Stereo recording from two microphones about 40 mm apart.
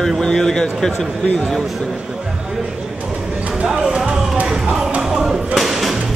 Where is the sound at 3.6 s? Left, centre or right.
Centre.